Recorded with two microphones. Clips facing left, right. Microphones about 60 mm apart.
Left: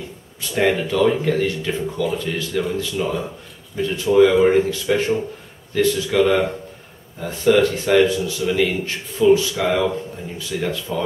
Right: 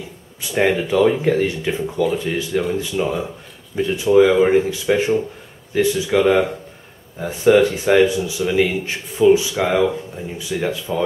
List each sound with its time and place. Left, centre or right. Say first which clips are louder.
0.4 s a man's voice: right 1 dB; centre